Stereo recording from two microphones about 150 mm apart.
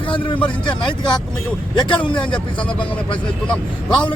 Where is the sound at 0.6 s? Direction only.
30° left (ahead or behind).